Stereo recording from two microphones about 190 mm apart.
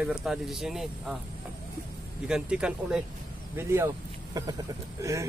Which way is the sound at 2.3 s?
5° right (ahead or behind).